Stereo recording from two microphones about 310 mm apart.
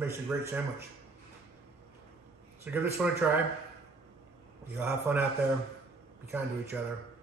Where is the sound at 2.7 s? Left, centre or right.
Centre.